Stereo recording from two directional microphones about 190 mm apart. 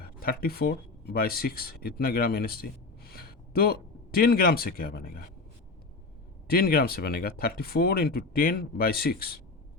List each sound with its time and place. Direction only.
0.0 s speech: 50° left (ahead or behind)
6.5 s speech: 50° left (ahead or behind)